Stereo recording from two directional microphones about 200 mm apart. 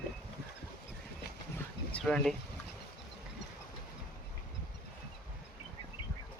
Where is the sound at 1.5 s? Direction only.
5° left (ahead or behind).